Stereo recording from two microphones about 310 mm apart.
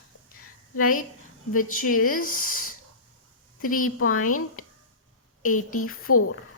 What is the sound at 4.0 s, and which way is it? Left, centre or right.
Speech, left.